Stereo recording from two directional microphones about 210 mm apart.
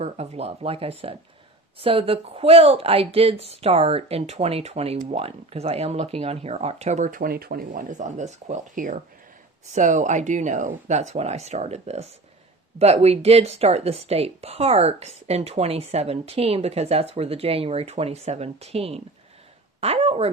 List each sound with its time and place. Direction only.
0.0 s a woman's voice: 30° right (ahead or behind)